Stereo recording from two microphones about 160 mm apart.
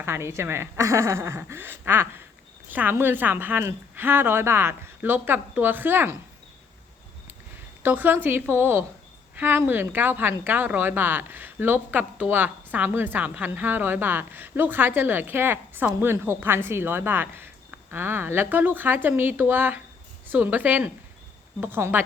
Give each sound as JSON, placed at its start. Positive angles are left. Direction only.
{"t": 0.0, "sound": "speech", "side_deg": -15}
{"t": 7.8, "sound": "speech", "side_deg": -10}